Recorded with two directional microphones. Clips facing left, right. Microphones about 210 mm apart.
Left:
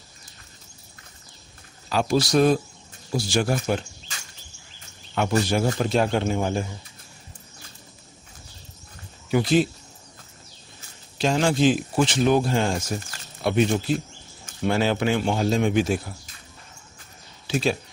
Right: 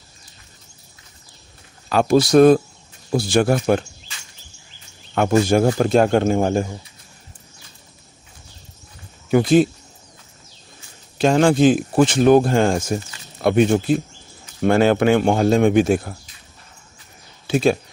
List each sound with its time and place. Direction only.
1.9 s a man's voice: 55° right (ahead or behind)
5.1 s speech: 50° right (ahead or behind)
9.3 s speech: 50° right (ahead or behind)
11.1 s a man's voice: 55° right (ahead or behind)
17.5 s speech: 50° right (ahead or behind)